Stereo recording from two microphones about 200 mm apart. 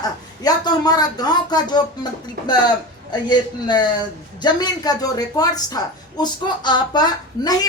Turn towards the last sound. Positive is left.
turn(degrees=20)  # may be behind; listen again after turning